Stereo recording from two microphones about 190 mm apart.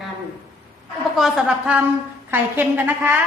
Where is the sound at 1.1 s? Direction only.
Centre (ahead or behind).